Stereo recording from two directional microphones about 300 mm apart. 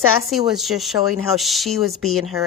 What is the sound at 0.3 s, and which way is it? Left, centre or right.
Speech, centre.